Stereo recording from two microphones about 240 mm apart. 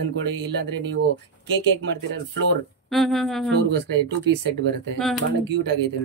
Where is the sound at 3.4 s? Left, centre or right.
Right.